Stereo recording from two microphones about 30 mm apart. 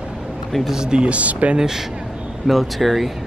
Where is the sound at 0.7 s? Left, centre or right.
Right.